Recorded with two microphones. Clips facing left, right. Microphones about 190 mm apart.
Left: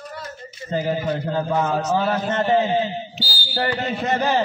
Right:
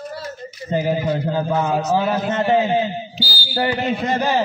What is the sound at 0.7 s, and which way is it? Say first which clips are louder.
A man's voice: right 3 dB; 10° right (ahead or behind).